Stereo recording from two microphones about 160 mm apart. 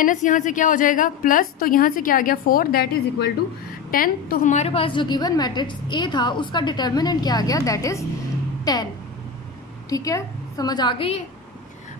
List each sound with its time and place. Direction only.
0.0 s a woman's voice: 55° left (ahead or behind); by 3.3 s 80° left
3.9 s a woman's voice: 60° left (ahead or behind); by 8.8 s 20° left (ahead or behind)
9.8 s a woman's voice: 20° left (ahead or behind); by 11.2 s 35° left (ahead or behind)